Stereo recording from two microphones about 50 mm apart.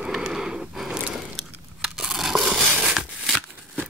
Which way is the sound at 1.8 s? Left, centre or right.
Centre.